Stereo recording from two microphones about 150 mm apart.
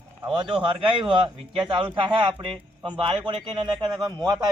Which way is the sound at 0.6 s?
35° right (ahead or behind).